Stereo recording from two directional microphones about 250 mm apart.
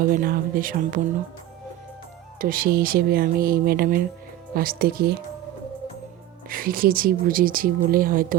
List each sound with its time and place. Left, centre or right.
0.2 s speech: right
2.4 s speech: right
6.5 s speech: right